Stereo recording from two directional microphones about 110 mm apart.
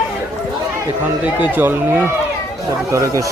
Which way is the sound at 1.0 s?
15° right (ahead or behind).